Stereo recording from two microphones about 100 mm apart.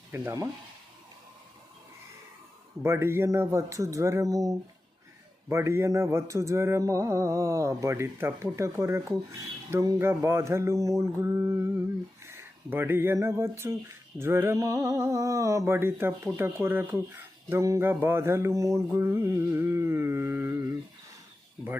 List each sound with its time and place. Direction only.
0.1 s mantra: 25° right (ahead or behind)
2.8 s mantra: 25° right (ahead or behind)